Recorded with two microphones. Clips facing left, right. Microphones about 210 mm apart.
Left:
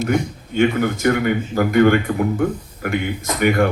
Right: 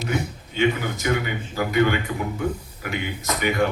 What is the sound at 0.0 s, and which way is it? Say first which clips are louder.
Speech: left 7 dB; 50° left (ahead or behind).